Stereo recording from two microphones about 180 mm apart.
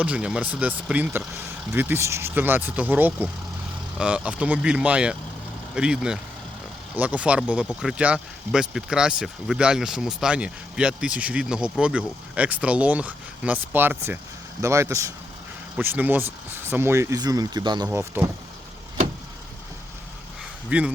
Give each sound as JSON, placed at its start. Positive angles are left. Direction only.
{"t": 0.0, "sound": "speech", "side_deg": -5}
{"t": 17.8, "sound": "speech", "side_deg": -10}
{"t": 20.7, "sound": "speech", "side_deg": -5}